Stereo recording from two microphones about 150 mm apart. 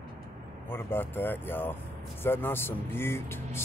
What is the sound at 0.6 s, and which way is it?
Speech, 15° left (ahead or behind).